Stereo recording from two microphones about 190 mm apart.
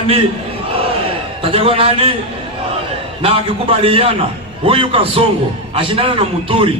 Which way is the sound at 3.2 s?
30° right (ahead or behind).